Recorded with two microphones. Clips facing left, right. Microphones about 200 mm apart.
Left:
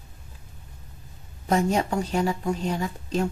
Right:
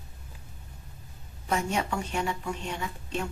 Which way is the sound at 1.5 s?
35° left (ahead or behind).